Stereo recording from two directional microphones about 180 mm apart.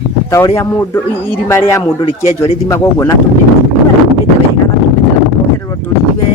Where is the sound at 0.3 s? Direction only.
15° left (ahead or behind).